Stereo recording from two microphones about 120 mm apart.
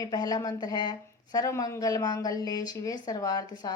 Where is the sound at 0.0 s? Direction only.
30° left (ahead or behind).